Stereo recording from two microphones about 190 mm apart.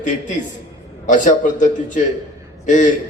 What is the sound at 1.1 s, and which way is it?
A man's voice, 40° left (ahead or behind).